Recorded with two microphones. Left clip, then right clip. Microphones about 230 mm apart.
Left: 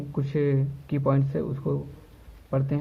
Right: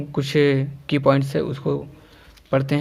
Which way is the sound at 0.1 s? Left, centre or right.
Right.